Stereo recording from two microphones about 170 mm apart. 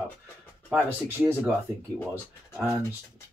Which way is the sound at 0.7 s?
10° right (ahead or behind).